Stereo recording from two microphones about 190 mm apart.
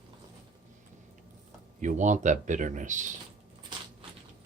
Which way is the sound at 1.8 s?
40° right (ahead or behind).